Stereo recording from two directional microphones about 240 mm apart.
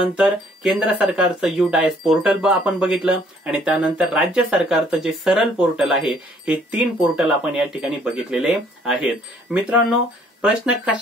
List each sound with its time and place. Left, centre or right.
0.1 s speech: centre